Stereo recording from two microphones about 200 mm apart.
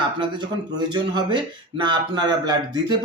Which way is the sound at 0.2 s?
20° right (ahead or behind).